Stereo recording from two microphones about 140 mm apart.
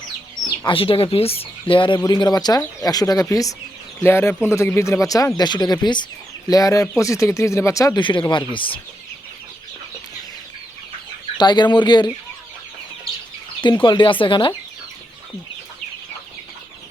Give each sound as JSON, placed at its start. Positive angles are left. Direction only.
{"t": 0.6, "sound": "speech", "side_deg": 40}
{"t": 8.2, "sound": "speech", "side_deg": 35}
{"t": 11.3, "sound": "speech", "side_deg": 30}
{"t": 13.8, "sound": "speech", "side_deg": 35}